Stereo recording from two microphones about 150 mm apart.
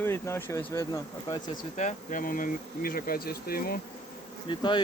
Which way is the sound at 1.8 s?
60° left (ahead or behind).